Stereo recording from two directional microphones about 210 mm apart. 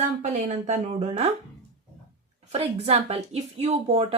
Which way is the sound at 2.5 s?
30° right (ahead or behind).